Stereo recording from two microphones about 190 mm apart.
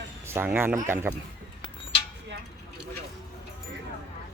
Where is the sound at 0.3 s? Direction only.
15° right (ahead or behind).